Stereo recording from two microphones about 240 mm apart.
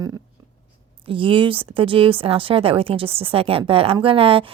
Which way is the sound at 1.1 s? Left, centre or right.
Right.